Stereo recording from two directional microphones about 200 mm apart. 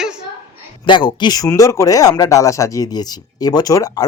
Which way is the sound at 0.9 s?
20° left (ahead or behind).